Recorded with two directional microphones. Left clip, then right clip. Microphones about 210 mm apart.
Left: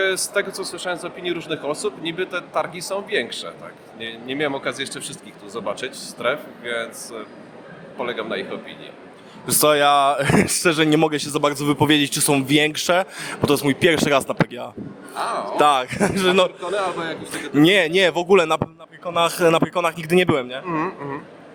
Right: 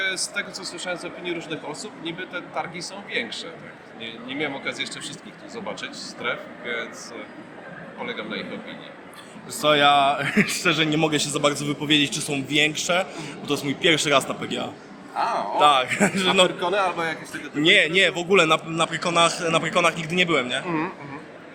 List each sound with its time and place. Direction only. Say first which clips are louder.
0.0 s speech: left 5 dB; 55° left (ahead or behind)
9.5 s speech: left 2 dB; 55° left (ahead or behind)
15.2 s a man's voice: even; 20° right (ahead or behind)
15.5 s speech: left 1 dB; 55° left (ahead or behind)
16.6 s a man's voice: right 1 dB; 25° right (ahead or behind)
17.6 s speech: left 2 dB; 50° left (ahead or behind)
18.8 s a man's voice: right 8 dB; centre (ahead or behind)
19.2 s speech: left 6 dB; 45° left (ahead or behind)
20.5 s a man's voice: right 2 dB; 30° left (ahead or behind)